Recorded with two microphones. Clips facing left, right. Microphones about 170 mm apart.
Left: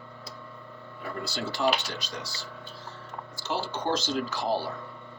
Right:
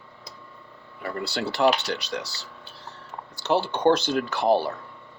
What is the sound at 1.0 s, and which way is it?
Speech, 65° right (ahead or behind).